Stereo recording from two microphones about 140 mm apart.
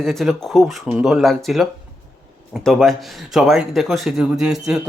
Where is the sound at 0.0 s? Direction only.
Centre (ahead or behind).